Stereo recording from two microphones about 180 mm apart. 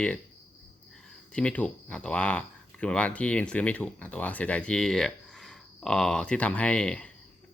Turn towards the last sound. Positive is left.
turn(degrees=5)  # may be behind; listen again after turning